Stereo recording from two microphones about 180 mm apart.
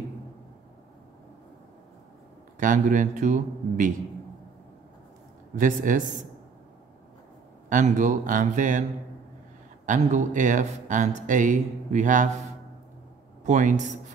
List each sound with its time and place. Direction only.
2.6 s speech: 45° right (ahead or behind)
5.6 s speech: 45° right (ahead or behind)
7.7 s speech: 45° right (ahead or behind)
9.8 s speech: 45° right (ahead or behind)
13.5 s speech: 45° right (ahead or behind)